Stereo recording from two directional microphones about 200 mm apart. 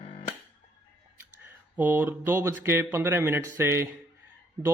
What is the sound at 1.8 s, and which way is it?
Speech, 10° right (ahead or behind).